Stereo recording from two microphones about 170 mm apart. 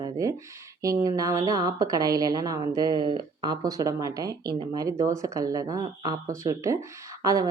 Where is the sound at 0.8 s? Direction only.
20° right (ahead or behind).